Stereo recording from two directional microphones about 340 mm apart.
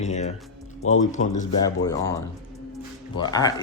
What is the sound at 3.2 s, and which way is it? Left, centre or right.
Speech, centre.